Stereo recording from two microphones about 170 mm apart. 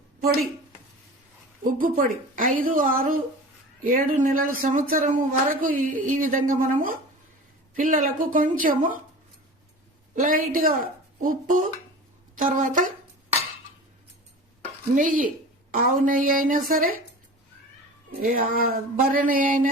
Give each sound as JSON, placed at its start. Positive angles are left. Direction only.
{"t": 1.6, "sound": "a woman's voice", "side_deg": -55}
{"t": 10.2, "sound": "a woman's voice", "side_deg": -55}
{"t": 14.9, "sound": "a woman's voice", "side_deg": -55}
{"t": 18.2, "sound": "a woman's voice", "side_deg": -60}